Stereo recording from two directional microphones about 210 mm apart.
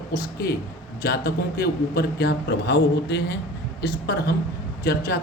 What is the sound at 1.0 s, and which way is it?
A man's voice, 50° left (ahead or behind).